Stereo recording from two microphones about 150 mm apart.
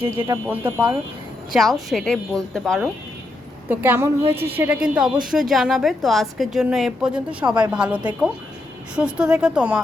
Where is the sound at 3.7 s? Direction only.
10° right (ahead or behind).